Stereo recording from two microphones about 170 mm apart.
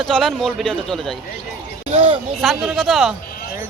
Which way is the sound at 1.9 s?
35° right (ahead or behind).